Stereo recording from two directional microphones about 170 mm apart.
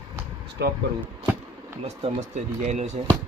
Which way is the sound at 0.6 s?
80° right.